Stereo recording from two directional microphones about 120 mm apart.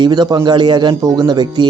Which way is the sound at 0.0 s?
35° right (ahead or behind).